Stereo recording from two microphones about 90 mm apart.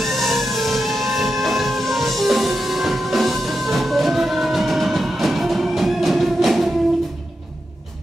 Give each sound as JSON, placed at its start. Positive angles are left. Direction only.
{"t": 0.0, "sound": "music", "side_deg": 0}